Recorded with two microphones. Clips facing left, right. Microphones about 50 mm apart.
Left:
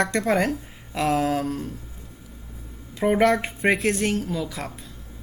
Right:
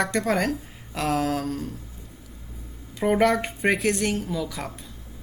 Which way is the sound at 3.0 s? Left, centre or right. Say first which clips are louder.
Left 1 dB; centre.